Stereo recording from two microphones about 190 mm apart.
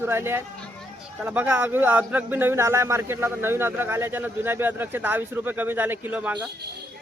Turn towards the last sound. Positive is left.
turn(degrees=-10)  # may be behind; listen again after turning